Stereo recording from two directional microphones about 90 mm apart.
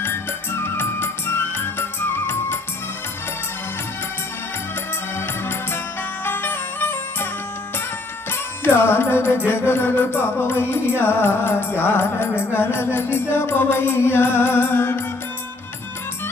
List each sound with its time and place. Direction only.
0.0 s music: 25° left (ahead or behind)
5.1 s music: 25° left (ahead or behind)
8.3 s music: 25° left (ahead or behind)